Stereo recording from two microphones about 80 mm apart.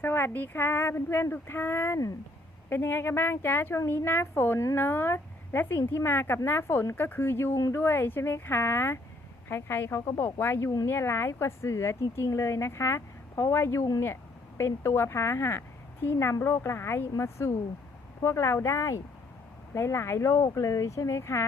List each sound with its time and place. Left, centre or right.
0.0 s a woman's voice: left